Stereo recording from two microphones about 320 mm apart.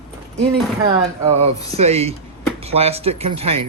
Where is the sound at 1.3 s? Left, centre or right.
Centre.